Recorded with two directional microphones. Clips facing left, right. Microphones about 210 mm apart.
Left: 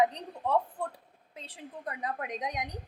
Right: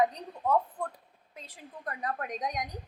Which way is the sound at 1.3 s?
30° left (ahead or behind).